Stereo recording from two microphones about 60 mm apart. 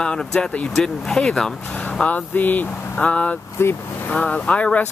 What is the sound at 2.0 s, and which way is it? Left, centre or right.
Speech, left.